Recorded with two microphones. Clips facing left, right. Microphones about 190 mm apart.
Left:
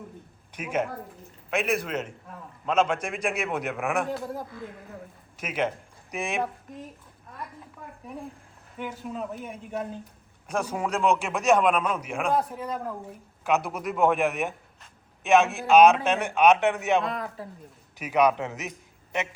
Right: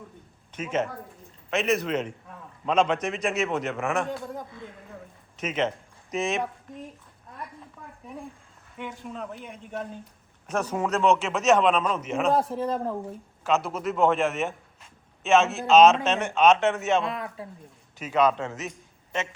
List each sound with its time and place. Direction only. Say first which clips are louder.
0.5 s a man's voice: right 1 dB; 10° left (ahead or behind)
8.0 s a man's voice: left 1 dB; centre (ahead or behind)
12.3 s a man's voice: right 2 dB; 30° right (ahead or behind)
13.4 s a man's voice: right 1 dB; 15° left (ahead or behind)
17.0 s speech: even; centre (ahead or behind)
18.0 s a man's voice: even; 15° left (ahead or behind)